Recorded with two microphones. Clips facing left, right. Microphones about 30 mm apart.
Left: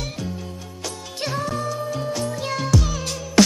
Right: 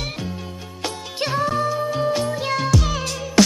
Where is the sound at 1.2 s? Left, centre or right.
Right.